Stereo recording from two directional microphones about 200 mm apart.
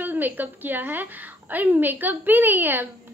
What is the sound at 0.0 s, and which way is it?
A woman's voice, 10° right (ahead or behind).